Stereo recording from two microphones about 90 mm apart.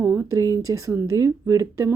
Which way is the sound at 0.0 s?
20° right (ahead or behind).